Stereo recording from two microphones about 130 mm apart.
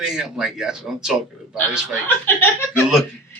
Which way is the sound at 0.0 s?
5° right (ahead or behind).